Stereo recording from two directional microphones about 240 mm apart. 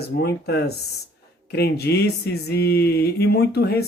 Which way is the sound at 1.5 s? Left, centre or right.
Left.